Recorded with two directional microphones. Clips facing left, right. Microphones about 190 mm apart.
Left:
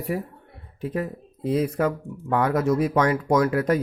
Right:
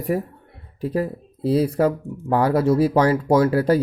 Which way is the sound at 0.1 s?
45° right (ahead or behind).